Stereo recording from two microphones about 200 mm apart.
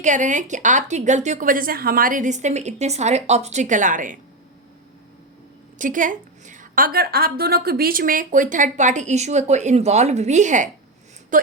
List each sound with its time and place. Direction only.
0.0 s a woman's voice: 40° right (ahead or behind)
5.8 s a woman's voice: 40° right (ahead or behind)